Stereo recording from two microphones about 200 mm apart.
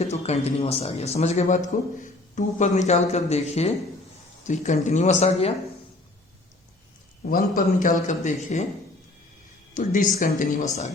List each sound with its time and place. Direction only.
0.0 s a man's voice: 30° left (ahead or behind)
7.3 s a man's voice: 45° left (ahead or behind)
9.7 s a man's voice: 40° left (ahead or behind)